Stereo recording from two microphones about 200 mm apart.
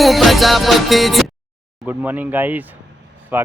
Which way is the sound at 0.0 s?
Centre (ahead or behind).